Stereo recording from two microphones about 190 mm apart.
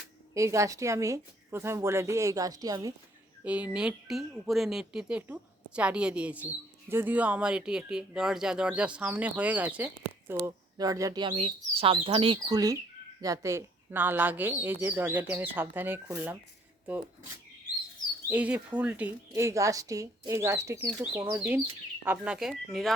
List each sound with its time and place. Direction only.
0.3 s speech: 15° right (ahead or behind)
3.4 s speech: 5° right (ahead or behind)
18.3 s speech: 10° right (ahead or behind)